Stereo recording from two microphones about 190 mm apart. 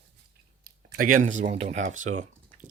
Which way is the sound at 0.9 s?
45° right (ahead or behind).